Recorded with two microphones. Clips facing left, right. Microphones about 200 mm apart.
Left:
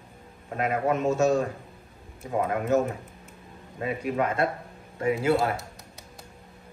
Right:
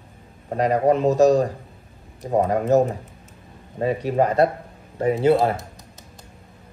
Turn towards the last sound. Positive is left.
turn(degrees=-35)  # may be behind; listen again after turning